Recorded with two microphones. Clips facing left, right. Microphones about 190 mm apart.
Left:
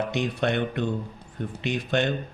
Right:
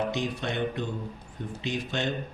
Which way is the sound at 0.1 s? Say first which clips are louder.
Left 5 dB; 65° left (ahead or behind).